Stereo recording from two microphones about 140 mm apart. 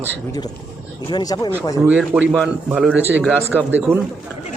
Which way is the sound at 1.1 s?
30° left (ahead or behind).